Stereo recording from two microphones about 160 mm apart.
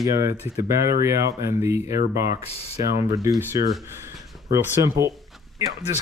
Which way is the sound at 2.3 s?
40° left (ahead or behind).